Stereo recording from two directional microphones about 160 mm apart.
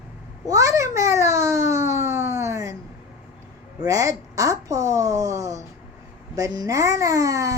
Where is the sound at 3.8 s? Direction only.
20° right (ahead or behind).